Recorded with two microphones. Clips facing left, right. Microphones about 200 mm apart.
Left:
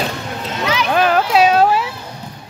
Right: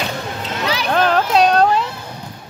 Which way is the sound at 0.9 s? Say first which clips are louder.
Left 1 dB; 5° left (ahead or behind).